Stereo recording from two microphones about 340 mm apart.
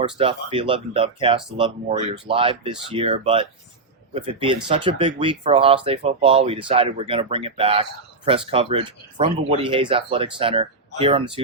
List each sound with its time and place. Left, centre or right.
0.0 s speech: centre